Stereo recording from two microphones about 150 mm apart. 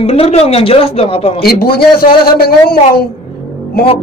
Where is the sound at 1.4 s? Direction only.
85° left.